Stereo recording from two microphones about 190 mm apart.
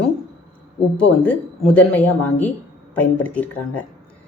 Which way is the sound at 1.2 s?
10° left (ahead or behind).